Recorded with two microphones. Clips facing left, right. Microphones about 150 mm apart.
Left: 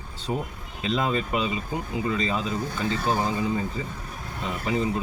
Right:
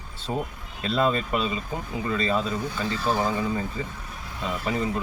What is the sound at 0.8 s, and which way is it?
Speech, 15° left (ahead or behind).